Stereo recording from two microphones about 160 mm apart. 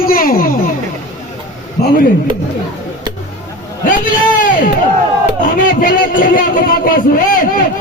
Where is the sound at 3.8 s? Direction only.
55° left (ahead or behind).